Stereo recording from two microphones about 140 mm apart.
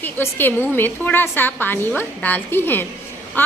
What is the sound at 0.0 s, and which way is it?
A woman's voice, 15° left (ahead or behind).